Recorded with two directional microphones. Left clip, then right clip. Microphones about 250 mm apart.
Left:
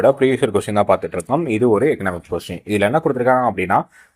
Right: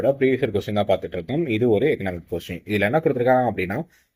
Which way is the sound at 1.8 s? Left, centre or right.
Left.